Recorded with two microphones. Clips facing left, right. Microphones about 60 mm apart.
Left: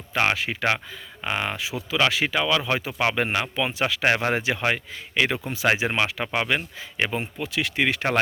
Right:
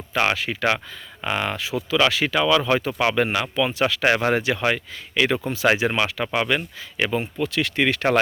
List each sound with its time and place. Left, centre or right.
0.1 s speech: centre
3.0 s speech: centre